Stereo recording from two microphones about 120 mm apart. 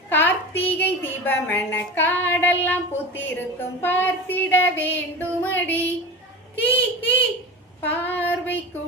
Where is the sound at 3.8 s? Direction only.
15° left (ahead or behind).